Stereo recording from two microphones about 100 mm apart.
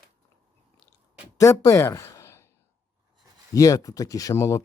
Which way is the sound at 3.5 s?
35° left (ahead or behind).